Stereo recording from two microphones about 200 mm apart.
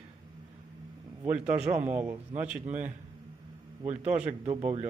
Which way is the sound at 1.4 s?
35° right (ahead or behind).